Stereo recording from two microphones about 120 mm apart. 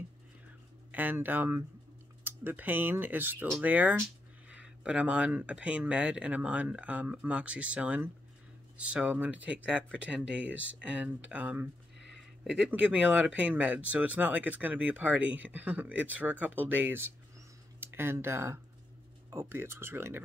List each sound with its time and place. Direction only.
0.9 s speech: 15° right (ahead or behind)